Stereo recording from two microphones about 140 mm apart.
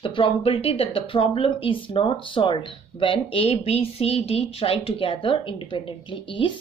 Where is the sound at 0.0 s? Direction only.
40° left (ahead or behind).